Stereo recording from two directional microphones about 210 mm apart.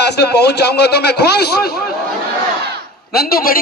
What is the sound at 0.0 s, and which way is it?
A man's voice, 50° left (ahead or behind).